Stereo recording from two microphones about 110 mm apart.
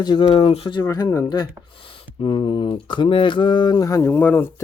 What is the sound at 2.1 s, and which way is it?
Speech, 55° left (ahead or behind).